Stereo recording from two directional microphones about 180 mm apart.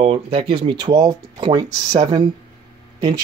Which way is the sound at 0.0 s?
30° right (ahead or behind).